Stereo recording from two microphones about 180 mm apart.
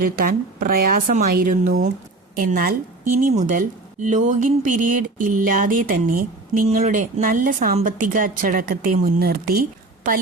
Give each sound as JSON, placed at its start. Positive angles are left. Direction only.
{"t": 0.0, "sound": "speech", "side_deg": -55}